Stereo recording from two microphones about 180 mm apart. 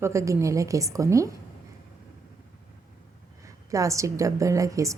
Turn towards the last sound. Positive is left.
turn(degrees=-20)  # may be behind; listen again after turning